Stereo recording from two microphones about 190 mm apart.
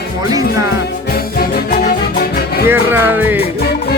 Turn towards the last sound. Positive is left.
turn(degrees=-10)  # may be behind; listen again after turning